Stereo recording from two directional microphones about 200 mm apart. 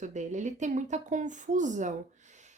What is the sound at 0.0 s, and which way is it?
A woman's voice, 35° right (ahead or behind).